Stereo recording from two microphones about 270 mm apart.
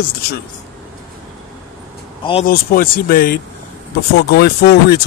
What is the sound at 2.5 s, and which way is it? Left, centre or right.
Speech, left.